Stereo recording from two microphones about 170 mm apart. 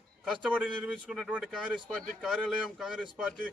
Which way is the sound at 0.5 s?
5° right (ahead or behind).